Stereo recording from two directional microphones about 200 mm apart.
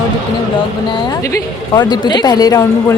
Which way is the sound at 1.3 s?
20° left (ahead or behind).